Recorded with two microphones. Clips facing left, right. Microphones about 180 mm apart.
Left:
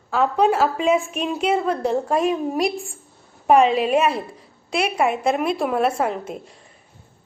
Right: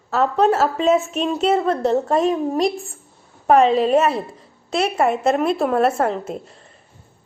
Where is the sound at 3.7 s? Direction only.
25° right (ahead or behind).